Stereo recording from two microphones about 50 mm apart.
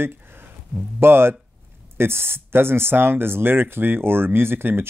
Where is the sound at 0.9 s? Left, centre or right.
Right.